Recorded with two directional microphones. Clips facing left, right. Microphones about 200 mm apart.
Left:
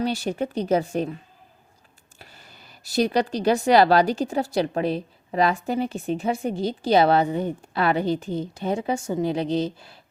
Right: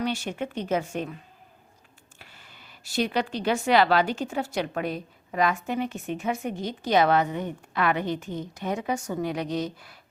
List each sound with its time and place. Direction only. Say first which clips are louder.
0.0 s speech: left 4 dB; 35° left (ahead or behind)
2.1 s speech: left 4 dB; 40° left (ahead or behind)